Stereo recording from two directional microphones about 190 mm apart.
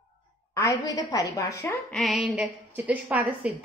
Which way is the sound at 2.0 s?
Centre (ahead or behind).